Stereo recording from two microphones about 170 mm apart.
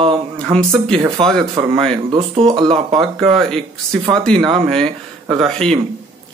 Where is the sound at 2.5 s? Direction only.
25° right (ahead or behind).